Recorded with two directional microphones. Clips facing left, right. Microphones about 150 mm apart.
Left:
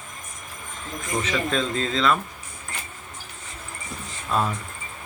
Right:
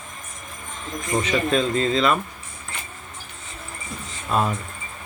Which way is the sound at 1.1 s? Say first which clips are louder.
Right 3 dB; 20° right (ahead or behind).